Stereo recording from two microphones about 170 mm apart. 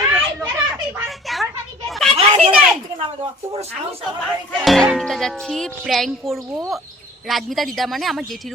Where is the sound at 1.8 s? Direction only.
Centre (ahead or behind).